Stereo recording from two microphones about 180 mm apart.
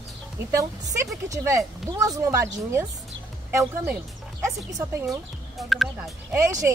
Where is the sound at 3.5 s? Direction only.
15° right (ahead or behind).